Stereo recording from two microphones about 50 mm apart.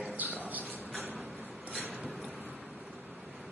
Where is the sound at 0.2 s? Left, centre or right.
Right.